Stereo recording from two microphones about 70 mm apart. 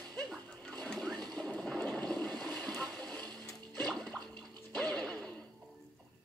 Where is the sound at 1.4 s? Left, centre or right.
Centre.